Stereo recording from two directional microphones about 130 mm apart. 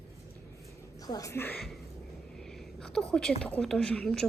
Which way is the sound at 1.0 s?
25° left (ahead or behind).